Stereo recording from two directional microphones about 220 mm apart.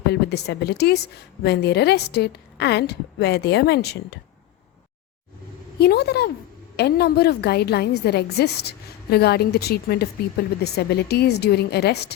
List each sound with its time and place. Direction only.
0.1 s a woman's voice: 50° left (ahead or behind)
5.8 s a woman's voice: 45° left (ahead or behind)